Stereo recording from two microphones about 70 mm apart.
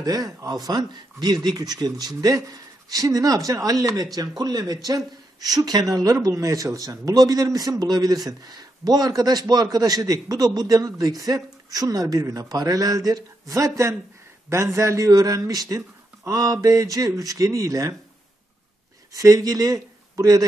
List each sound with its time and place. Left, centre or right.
0.0 s a man's voice: right
6.2 s a man's voice: right
19.1 s speech: right